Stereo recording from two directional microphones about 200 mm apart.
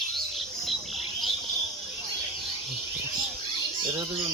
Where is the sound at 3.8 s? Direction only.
20° right (ahead or behind).